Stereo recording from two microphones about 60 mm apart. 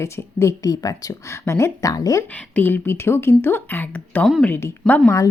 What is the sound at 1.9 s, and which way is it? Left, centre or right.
Speech, left.